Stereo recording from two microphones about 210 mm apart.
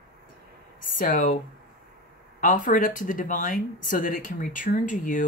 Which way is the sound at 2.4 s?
40° left (ahead or behind).